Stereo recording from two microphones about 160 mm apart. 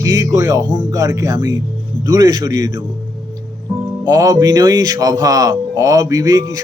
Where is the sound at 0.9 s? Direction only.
20° right (ahead or behind).